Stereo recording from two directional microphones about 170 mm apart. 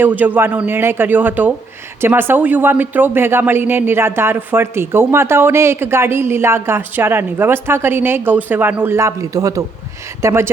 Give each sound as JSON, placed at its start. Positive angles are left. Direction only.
{"t": 0.0, "sound": "speech", "side_deg": -10}